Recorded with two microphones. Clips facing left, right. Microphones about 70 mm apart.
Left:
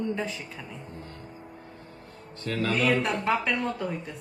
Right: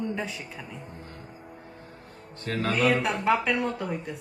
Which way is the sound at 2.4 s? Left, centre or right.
Right.